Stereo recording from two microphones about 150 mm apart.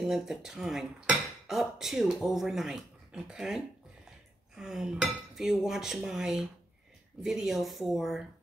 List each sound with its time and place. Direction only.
0.0 s speech: centre (ahead or behind)